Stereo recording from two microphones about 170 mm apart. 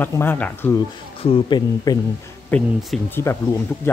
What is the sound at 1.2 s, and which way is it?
Speech, 30° left (ahead or behind).